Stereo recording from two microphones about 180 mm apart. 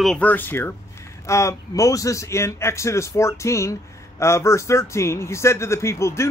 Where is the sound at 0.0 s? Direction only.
5° left (ahead or behind).